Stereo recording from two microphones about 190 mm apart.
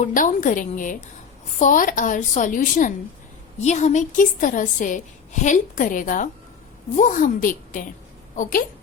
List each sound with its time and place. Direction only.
0.0 s a woman's voice: 45° left (ahead or behind)